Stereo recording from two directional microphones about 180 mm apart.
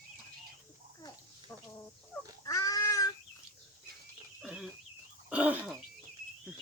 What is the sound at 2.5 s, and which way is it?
Cat, 20° left (ahead or behind).